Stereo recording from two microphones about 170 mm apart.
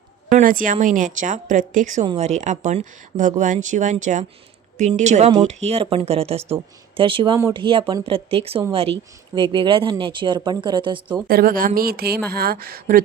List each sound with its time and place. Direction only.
0.3 s speech: 50° right (ahead or behind); by 11.2 s 30° right (ahead or behind)
11.3 s a woman's voice: 60° right (ahead or behind)